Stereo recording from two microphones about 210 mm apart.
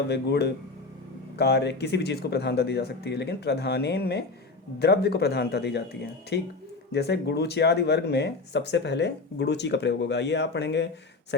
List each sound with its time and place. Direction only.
0.1 s speech: 50° left (ahead or behind)